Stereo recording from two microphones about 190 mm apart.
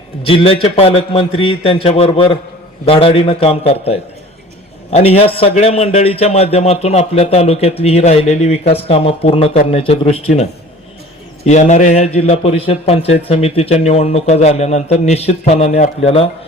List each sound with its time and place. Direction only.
0.3 s a man's voice: 30° left (ahead or behind)